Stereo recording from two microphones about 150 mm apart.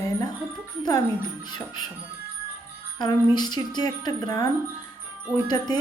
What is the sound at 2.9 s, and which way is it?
A woman's voice, 30° left (ahead or behind).